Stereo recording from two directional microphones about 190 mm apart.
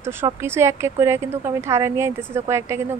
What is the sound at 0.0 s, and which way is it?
Speech, 10° right (ahead or behind).